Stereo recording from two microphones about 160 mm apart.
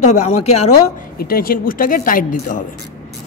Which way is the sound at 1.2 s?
65° left (ahead or behind).